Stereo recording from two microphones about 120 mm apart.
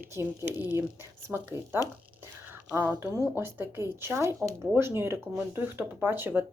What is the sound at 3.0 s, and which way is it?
Speech, 20° right (ahead or behind).